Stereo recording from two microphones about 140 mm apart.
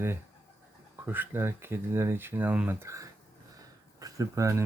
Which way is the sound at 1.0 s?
15° right (ahead or behind).